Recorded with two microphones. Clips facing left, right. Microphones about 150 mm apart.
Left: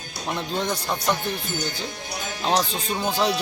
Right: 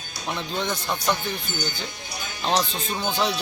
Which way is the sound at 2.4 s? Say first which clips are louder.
Left 1 dB; 5° left (ahead or behind).